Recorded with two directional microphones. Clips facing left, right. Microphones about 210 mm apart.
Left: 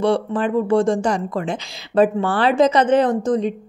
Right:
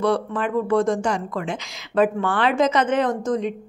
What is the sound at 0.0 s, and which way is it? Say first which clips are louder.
Speech: left 3 dB; 30° left (ahead or behind).